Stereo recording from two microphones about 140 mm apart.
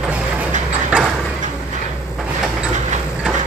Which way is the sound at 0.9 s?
10° right (ahead or behind).